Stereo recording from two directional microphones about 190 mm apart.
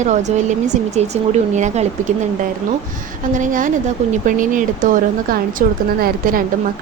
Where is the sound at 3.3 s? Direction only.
45° right (ahead or behind).